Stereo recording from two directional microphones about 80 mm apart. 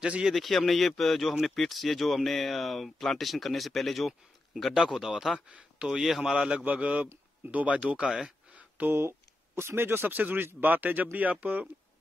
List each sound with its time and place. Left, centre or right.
0.0 s speech: centre
0.3 s speech: centre
8.5 s a sound: centre
9.6 s speech: right